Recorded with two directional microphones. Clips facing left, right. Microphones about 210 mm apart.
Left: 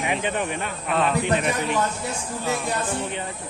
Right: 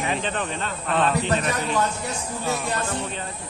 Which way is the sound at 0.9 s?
Centre (ahead or behind).